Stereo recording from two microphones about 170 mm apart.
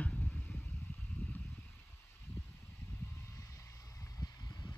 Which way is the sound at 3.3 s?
20° left (ahead or behind).